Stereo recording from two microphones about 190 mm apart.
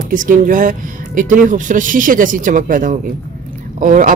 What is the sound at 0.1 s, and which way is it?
Speech, 45° right (ahead or behind).